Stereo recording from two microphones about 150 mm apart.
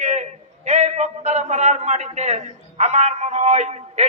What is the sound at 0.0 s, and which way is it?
A man's voice, 50° right (ahead or behind).